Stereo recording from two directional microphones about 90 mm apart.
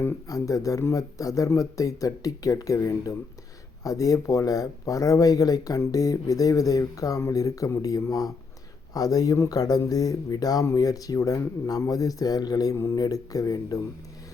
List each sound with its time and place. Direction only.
0.3 s speech: 40° left (ahead or behind)
12.7 s speech: 35° left (ahead or behind)